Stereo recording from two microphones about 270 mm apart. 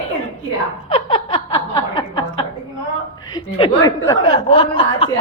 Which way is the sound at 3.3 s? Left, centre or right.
Centre.